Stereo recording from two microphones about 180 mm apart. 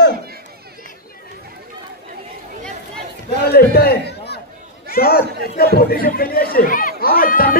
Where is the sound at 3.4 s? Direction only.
60° left (ahead or behind).